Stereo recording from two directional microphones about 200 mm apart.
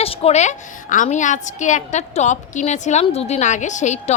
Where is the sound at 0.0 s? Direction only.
30° left (ahead or behind).